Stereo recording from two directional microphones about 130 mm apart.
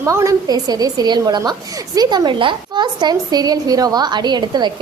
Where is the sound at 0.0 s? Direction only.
20° right (ahead or behind).